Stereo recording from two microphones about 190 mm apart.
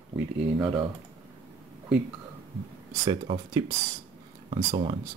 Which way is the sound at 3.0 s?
25° right (ahead or behind).